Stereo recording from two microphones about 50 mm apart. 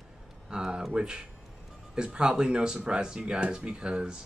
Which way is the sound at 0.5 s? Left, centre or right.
Centre.